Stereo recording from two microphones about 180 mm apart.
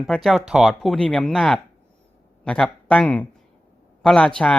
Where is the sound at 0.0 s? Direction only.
Centre (ahead or behind).